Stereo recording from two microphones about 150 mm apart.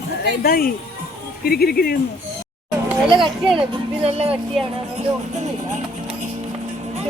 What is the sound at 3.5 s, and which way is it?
Music, 40° right (ahead or behind).